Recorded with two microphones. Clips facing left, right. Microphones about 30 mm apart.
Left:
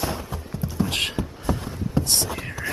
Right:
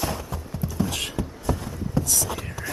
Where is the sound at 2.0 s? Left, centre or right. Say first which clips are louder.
Left 2 dB; left.